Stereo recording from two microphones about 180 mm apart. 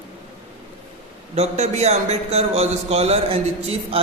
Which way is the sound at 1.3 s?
35° right (ahead or behind).